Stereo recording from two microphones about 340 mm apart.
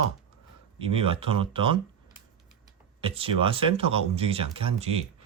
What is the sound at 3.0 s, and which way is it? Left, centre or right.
Speech, centre.